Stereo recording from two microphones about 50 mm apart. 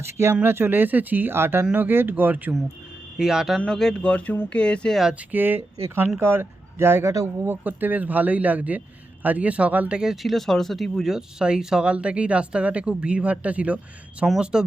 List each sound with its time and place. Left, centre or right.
0.4 s speech: right
3.2 s speech: centre
3.7 s speech: centre
4.0 s speech: left
5.3 s speech: right
7.0 s speech: right
7.4 s a woman's voice: right
10.2 s speech: centre
11.9 s a woman's voice: right
14.3 s speech: centre